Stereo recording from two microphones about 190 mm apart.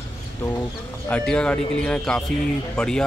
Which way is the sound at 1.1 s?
5° left (ahead or behind).